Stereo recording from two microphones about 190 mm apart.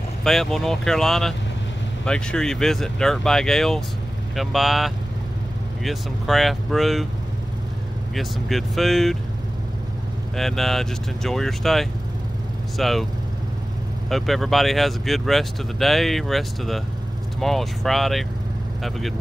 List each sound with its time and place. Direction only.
0.2 s speech: centre (ahead or behind)
8.1 s speech: centre (ahead or behind)
10.3 s speech: centre (ahead or behind)
14.0 s speech: centre (ahead or behind)